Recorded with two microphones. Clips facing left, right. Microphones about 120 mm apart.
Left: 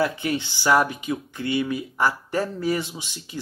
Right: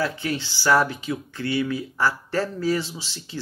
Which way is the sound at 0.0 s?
20° left (ahead or behind).